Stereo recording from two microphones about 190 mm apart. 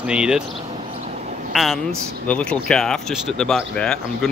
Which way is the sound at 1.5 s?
Centre (ahead or behind).